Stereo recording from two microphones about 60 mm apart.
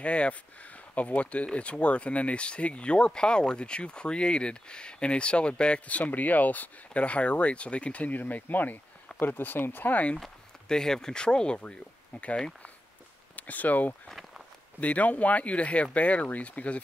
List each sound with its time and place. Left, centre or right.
0.0 s speech: centre
10.1 s speech: centre
13.4 s speech: left
14.0 s walk: centre
14.8 s speech: left